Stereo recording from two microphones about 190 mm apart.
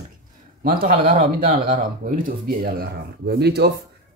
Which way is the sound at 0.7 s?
50° right (ahead or behind).